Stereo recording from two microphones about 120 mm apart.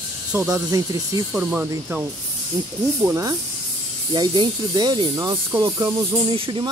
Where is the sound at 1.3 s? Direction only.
10° right (ahead or behind).